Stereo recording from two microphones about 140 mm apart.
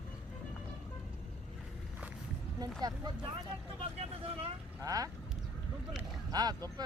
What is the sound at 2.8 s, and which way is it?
Speech, 30° right (ahead or behind).